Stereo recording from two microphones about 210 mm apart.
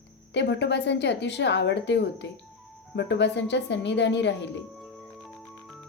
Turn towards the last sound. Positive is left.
turn(degrees=55)  # may be behind; listen again after turning